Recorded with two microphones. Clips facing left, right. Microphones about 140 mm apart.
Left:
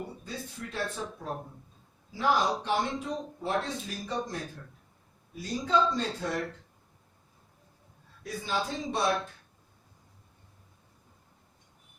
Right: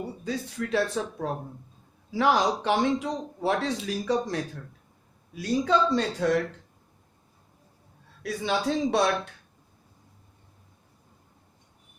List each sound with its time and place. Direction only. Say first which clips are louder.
0.3 s speech: right 10 dB; 90° right
5.3 s speech: right 4 dB; 80° right
8.2 s speech: right 5 dB; 80° right